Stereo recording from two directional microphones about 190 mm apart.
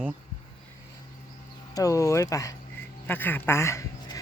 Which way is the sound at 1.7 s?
15° left (ahead or behind).